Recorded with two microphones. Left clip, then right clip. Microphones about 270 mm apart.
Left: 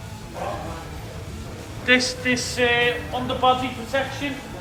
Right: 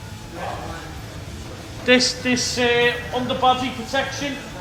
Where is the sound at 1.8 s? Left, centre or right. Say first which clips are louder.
Right 2 dB; centre.